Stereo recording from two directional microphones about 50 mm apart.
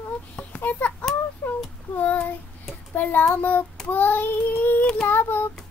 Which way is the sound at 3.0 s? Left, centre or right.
Left.